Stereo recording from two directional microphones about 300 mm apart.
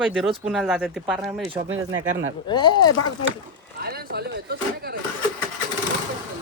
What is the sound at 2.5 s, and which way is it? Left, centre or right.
Speech, centre.